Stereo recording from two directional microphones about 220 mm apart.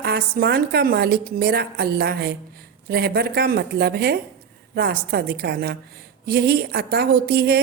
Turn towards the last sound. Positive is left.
turn(degrees=-45)  # may be behind; listen again after turning